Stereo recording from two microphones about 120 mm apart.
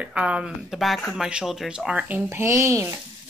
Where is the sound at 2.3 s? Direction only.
20° right (ahead or behind).